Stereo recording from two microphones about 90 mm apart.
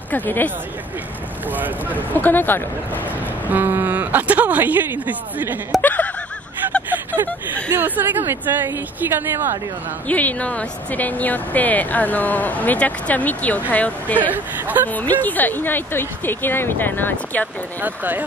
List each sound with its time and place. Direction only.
0.1 s speech: 20° left (ahead or behind)
1.5 s a woman's voice: 20° right (ahead or behind)
2.0 s speech: 20° left (ahead or behind)
3.4 s a woman's voice: 20° right (ahead or behind)
5.8 s snicker: 20° left (ahead or behind)
6.9 s a sound: 20° right (ahead or behind)
7.2 s speech: 15° left (ahead or behind)
7.7 s a woman's voice: 20° right (ahead or behind)
10.0 s speech: 15° left (ahead or behind)
14.3 s a woman's voice: 20° right (ahead or behind)
14.9 s speech: 20° left (ahead or behind)
17.7 s a woman's voice: 20° right (ahead or behind)